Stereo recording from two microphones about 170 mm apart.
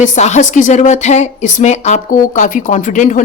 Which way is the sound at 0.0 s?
45° left (ahead or behind).